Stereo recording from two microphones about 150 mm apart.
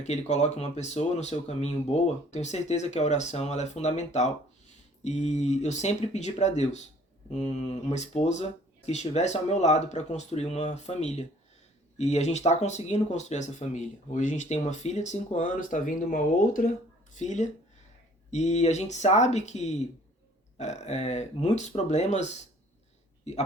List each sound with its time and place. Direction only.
0.0 s speech: 50° left (ahead or behind); by 16.6 s 70° left (ahead or behind)
17.2 s speech: 55° left (ahead or behind)